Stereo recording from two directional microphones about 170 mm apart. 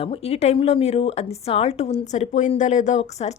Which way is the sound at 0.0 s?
35° left (ahead or behind).